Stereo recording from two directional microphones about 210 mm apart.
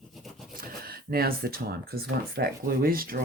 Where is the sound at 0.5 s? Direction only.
45° right (ahead or behind).